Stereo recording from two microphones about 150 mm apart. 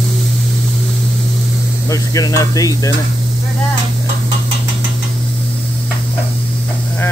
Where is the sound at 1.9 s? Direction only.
25° left (ahead or behind).